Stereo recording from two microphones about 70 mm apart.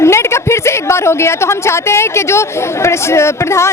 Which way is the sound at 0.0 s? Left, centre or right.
Left.